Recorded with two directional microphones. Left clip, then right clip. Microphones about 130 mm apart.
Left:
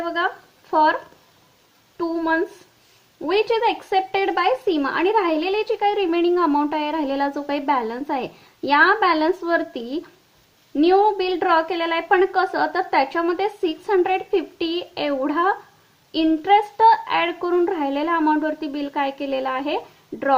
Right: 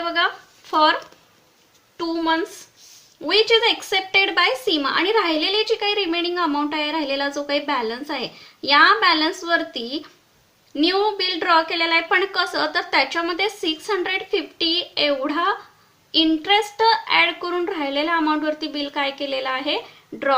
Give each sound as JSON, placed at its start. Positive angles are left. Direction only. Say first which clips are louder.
{"t": 0.7, "sound": "speech", "louder": "even", "side_deg": 25}
{"t": 2.0, "sound": "speech", "louder": "even", "side_deg": 30}